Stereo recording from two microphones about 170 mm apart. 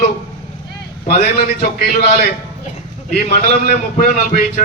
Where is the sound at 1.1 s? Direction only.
65° left (ahead or behind).